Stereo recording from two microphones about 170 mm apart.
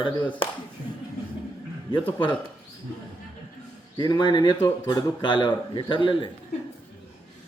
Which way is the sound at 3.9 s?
25° left (ahead or behind).